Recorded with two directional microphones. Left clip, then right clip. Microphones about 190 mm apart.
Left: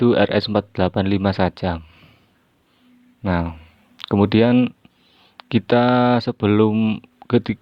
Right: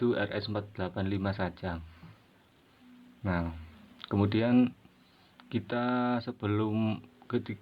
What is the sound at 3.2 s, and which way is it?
Speech, 60° left (ahead or behind).